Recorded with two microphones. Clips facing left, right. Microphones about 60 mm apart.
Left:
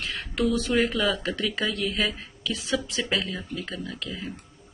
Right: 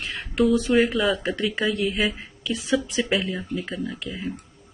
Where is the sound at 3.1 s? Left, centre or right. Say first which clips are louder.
Right 2 dB; centre.